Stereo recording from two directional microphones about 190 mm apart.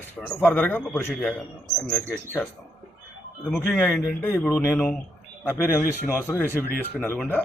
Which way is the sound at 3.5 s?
5° left (ahead or behind).